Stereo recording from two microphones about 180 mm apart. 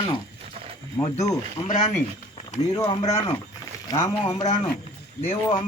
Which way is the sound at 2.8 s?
20° left (ahead or behind).